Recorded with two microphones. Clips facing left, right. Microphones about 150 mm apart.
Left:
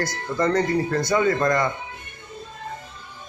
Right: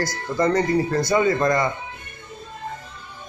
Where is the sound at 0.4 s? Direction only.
10° right (ahead or behind).